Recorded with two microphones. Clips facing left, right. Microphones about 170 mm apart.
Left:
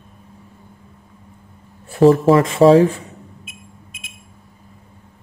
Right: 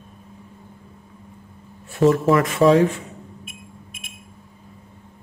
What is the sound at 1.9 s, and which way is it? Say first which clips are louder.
Speech: left 5 dB; 35° left (ahead or behind).